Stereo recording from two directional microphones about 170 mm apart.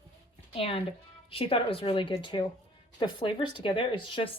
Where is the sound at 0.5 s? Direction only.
30° left (ahead or behind).